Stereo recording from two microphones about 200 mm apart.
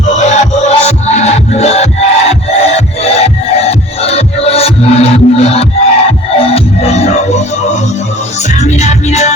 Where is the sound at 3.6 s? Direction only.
30° left (ahead or behind).